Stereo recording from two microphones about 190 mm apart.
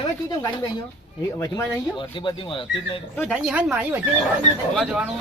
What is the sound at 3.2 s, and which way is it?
Speech, centre (ahead or behind).